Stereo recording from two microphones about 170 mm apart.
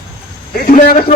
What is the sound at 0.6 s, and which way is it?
Speech, 55° left (ahead or behind).